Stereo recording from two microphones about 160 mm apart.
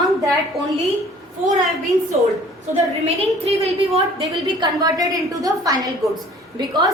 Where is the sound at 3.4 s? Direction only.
40° right (ahead or behind).